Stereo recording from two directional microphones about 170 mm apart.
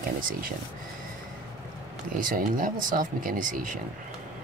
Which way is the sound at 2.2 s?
55° right (ahead or behind).